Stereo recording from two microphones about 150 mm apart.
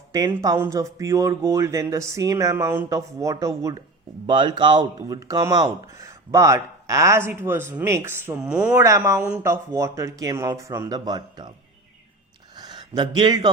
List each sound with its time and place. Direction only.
0.6 s speech: 20° right (ahead or behind)
4.3 s speech: 30° right (ahead or behind); by 8.8 s 5° right (ahead or behind)
8.8 s speech: 20° right (ahead or behind)
12.5 s a sound: 30° right (ahead or behind)